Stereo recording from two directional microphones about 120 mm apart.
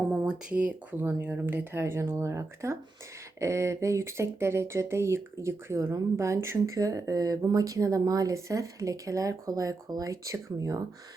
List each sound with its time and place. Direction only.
0.0 s speech: 10° right (ahead or behind); by 10.8 s 30° right (ahead or behind)